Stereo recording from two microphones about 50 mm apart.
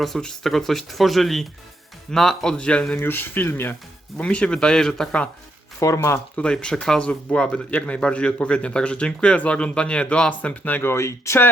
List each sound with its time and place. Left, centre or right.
0.0 s a man's voice: centre
3.0 s speech: left
4.2 s a man's voice: left
5.8 s speech: left
6.3 s a man's voice: centre; by 10.8 s left
10.8 s speech: left